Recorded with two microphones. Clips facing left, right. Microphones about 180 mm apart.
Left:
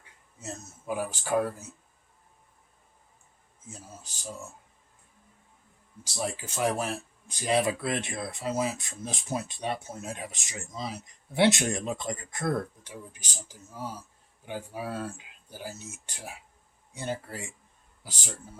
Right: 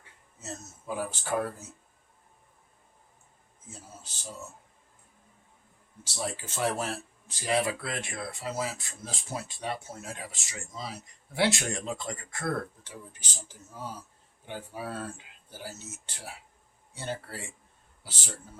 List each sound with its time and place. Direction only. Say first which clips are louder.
0.3 s speech: left 1 dB; 15° left (ahead or behind)
4.0 s speech: left 1 dB; 15° left (ahead or behind)
6.1 s speech: left 2 dB; 15° left (ahead or behind)